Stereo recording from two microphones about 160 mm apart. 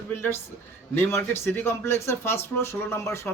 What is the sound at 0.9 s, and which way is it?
A man's voice, 15° left (ahead or behind).